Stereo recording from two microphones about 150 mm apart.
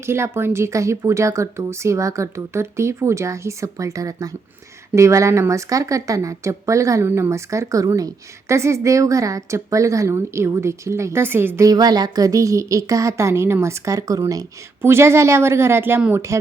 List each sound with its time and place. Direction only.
0.0 s a woman's voice: 15° right (ahead or behind)